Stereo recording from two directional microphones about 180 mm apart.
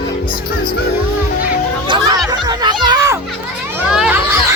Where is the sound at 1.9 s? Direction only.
25° right (ahead or behind).